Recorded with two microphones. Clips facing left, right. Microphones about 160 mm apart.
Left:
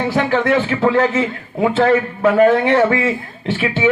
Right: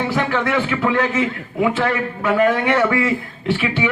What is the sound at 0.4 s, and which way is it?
A man's voice, 35° left (ahead or behind).